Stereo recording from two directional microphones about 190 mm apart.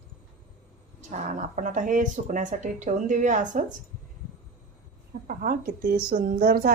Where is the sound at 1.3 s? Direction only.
40° right (ahead or behind).